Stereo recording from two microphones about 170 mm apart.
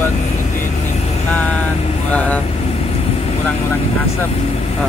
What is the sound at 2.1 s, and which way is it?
Speech, 10° left (ahead or behind).